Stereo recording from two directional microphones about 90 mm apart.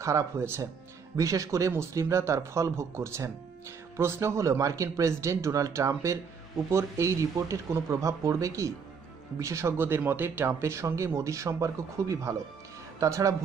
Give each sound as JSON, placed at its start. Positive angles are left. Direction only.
{"t": 0.0, "sound": "speech", "side_deg": -35}